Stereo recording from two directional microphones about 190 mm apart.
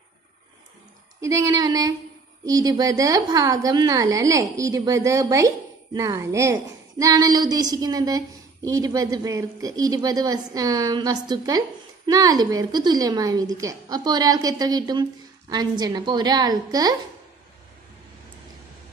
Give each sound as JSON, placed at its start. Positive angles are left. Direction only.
{"t": 1.2, "sound": "a woman's voice", "side_deg": -15}